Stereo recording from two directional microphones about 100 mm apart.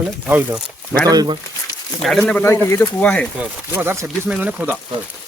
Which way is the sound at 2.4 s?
30° left (ahead or behind).